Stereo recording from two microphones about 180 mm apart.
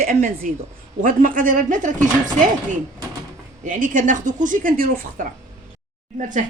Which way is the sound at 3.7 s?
45° right (ahead or behind).